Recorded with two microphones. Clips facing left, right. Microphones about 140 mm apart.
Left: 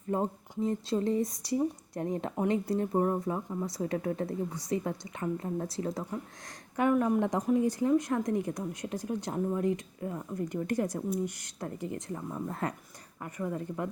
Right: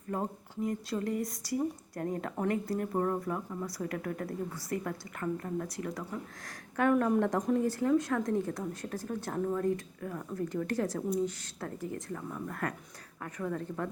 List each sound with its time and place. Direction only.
0.1 s speech: 25° left (ahead or behind)
6.9 s speech: 5° left (ahead or behind)
7.2 s speech: 15° left (ahead or behind)
13.2 s speech: 10° left (ahead or behind)